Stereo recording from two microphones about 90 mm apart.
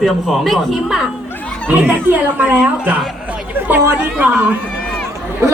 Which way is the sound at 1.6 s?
20° right (ahead or behind).